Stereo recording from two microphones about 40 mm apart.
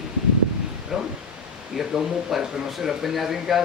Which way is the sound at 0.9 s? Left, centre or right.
Centre.